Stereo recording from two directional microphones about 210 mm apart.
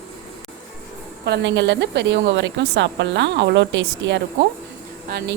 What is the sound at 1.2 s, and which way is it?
A woman's voice, 55° right (ahead or behind).